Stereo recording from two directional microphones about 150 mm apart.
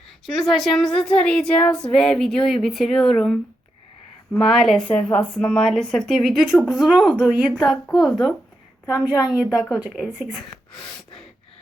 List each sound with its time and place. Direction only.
0.3 s speech: centre (ahead or behind)
9.3 s speech: 25° left (ahead or behind)
9.8 s speech: 5° right (ahead or behind)
10.7 s gasp: 5° left (ahead or behind)